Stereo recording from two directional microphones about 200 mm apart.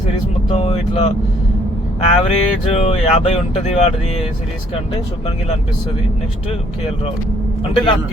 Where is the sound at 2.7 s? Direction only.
30° left (ahead or behind).